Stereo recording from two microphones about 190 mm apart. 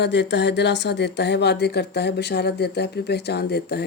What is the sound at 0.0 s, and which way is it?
A woman's voice, 65° left (ahead or behind).